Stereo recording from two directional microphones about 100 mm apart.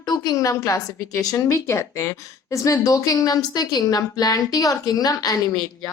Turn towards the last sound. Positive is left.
turn(degrees=40)  # may be behind; listen again after turning